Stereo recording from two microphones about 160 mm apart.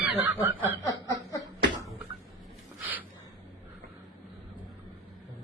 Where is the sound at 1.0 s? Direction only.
20° left (ahead or behind).